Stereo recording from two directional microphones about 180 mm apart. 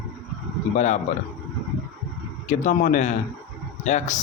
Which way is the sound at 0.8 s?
40° left (ahead or behind).